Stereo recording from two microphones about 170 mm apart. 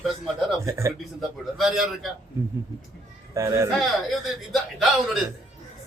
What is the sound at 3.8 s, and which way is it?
A man's voice, centre (ahead or behind).